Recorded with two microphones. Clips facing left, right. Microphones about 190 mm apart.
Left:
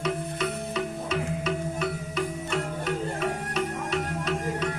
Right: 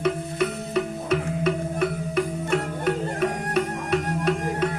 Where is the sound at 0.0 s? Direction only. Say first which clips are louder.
Right 5 dB; 55° right (ahead or behind).